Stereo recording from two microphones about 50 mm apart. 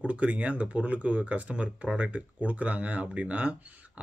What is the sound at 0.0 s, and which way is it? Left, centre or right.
Speech, right.